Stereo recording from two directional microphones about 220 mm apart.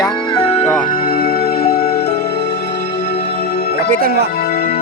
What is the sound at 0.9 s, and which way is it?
Music, 40° left (ahead or behind).